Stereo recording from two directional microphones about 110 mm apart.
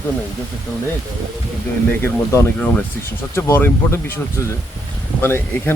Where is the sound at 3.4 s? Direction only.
20° left (ahead or behind).